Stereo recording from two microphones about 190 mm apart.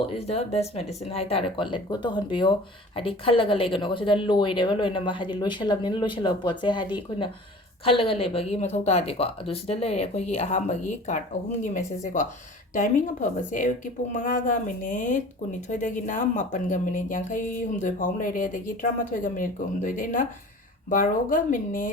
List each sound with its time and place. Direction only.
0.0 s speech: 35° left (ahead or behind)
7.9 s speech: 30° left (ahead or behind)
13.5 s speech: 45° left (ahead or behind)